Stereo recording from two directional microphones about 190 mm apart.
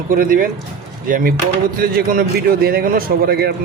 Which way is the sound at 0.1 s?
50° right (ahead or behind).